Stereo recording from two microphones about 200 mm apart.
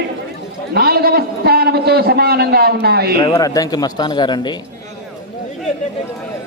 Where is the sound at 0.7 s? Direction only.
50° right (ahead or behind).